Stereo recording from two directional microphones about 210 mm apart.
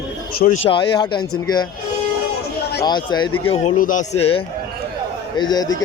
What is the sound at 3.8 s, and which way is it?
Speech, 35° left (ahead or behind).